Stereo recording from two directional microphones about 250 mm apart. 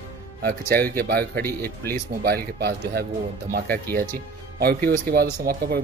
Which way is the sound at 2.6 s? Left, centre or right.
Right.